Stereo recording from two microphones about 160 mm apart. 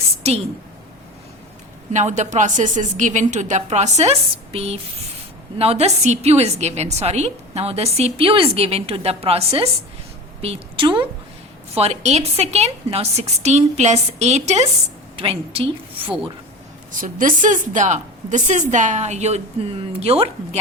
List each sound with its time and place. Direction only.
1.9 s a woman's voice: 50° right (ahead or behind)
16.9 s a woman's voice: 55° right (ahead or behind); by 20.6 s 35° right (ahead or behind)